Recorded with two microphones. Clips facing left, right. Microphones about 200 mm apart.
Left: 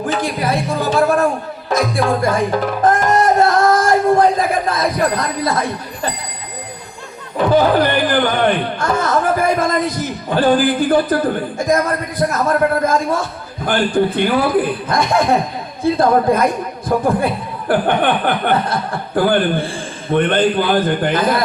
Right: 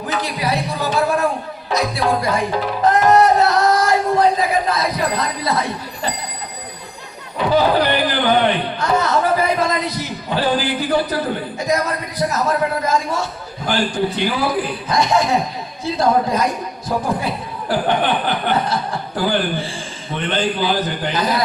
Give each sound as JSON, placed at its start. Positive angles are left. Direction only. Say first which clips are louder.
{"t": 0.2, "sound": "speech", "louder": "left 3 dB", "side_deg": 50}
{"t": 1.7, "sound": "music", "louder": "left 2 dB", "side_deg": 50}
{"t": 2.8, "sound": "a sound", "louder": "right 2 dB", "side_deg": 50}
{"t": 7.3, "sound": "speech", "louder": "left 3 dB", "side_deg": 50}